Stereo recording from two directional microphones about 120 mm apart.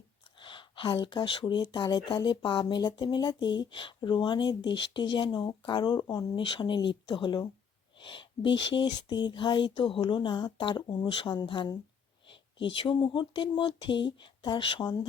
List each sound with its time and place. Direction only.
0.3 s speech: 45° left (ahead or behind)